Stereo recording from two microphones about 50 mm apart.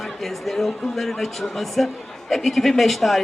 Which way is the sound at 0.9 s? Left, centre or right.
Centre.